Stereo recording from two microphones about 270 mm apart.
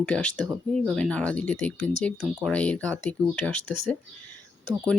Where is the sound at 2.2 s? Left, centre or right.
Centre.